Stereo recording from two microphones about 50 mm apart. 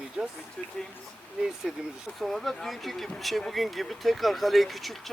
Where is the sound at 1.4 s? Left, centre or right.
Centre.